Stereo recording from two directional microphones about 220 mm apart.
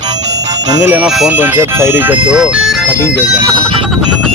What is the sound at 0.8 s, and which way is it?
Speech, 5° right (ahead or behind).